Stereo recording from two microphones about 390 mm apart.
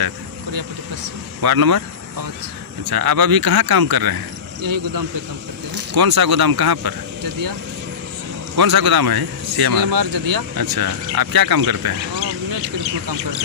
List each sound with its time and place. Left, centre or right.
1.4 s speech: right
2.8 s speech: right
5.9 s speech: right
8.5 s speech: right